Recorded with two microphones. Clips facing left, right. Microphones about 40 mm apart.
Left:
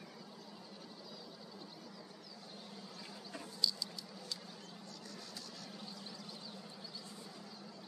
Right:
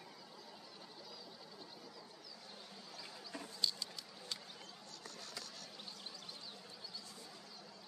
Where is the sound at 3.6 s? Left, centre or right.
Right.